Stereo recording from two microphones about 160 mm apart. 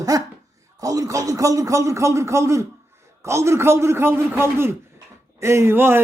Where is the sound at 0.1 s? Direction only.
20° right (ahead or behind).